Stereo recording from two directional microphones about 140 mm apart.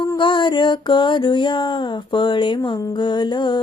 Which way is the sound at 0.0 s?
35° left (ahead or behind).